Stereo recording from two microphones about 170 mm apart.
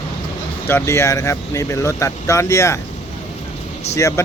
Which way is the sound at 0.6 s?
15° left (ahead or behind).